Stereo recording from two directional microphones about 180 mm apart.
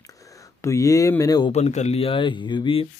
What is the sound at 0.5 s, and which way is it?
Speech, 15° left (ahead or behind).